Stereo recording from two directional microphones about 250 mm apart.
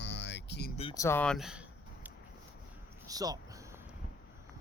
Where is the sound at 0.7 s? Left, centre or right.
Left; by 2.1 s centre.